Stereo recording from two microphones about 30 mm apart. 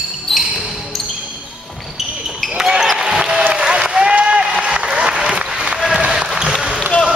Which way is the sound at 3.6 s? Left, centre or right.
Right.